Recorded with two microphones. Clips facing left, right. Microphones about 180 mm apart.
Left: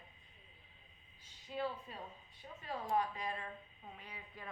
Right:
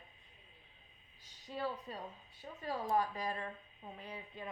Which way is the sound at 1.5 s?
35° right (ahead or behind).